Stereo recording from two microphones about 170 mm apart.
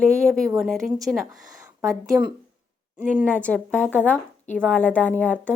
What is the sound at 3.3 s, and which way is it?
A woman's voice, 10° left (ahead or behind).